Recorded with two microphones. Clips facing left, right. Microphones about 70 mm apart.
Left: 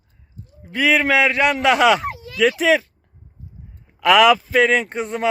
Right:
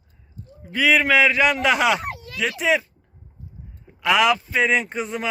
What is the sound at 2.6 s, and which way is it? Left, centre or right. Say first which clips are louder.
Speech: left 1 dB; left.